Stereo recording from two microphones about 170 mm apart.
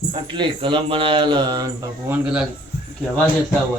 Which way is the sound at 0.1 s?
30° right (ahead or behind).